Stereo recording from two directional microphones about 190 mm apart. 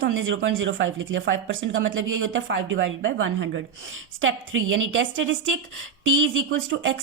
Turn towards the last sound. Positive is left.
turn(degrees=-85)